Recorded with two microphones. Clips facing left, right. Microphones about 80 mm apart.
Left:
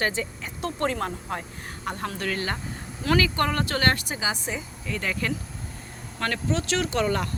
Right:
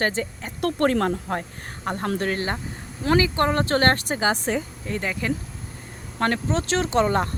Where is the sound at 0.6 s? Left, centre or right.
Right.